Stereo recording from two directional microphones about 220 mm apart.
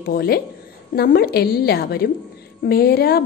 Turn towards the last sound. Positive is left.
turn(degrees=45)  # may be behind; listen again after turning